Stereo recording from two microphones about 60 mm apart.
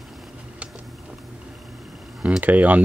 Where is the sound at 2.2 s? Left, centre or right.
Right.